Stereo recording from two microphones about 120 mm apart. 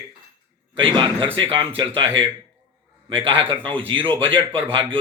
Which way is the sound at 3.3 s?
50° right (ahead or behind).